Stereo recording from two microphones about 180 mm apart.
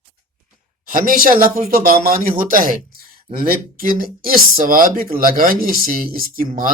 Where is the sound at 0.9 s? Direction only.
50° right (ahead or behind).